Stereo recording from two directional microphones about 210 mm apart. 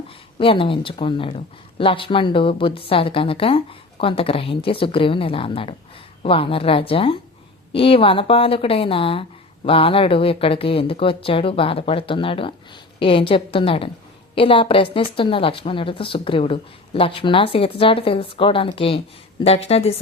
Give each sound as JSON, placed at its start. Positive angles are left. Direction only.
{"t": 0.3, "sound": "a woman's voice", "side_deg": 25}